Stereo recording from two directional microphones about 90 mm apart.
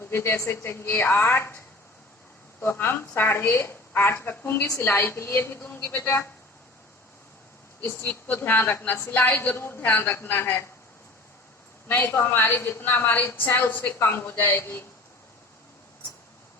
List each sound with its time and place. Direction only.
0.0 s a woman's voice: 25° left (ahead or behind)
2.6 s a woman's voice: 25° left (ahead or behind)
7.8 s a woman's voice: 20° left (ahead or behind)
11.9 s a woman's voice: 20° left (ahead or behind)